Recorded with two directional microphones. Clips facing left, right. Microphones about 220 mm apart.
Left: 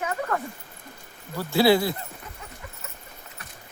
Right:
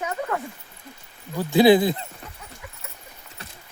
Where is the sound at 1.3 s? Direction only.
15° right (ahead or behind).